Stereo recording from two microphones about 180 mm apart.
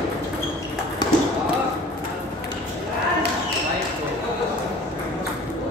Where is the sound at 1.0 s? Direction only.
20° left (ahead or behind).